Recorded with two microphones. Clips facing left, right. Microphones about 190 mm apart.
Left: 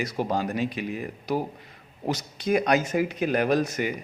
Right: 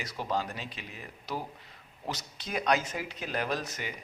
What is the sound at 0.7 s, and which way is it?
Speech, 10° left (ahead or behind).